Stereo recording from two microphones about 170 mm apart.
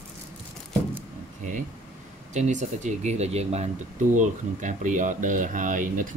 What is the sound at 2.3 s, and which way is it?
Speech, 45° right (ahead or behind).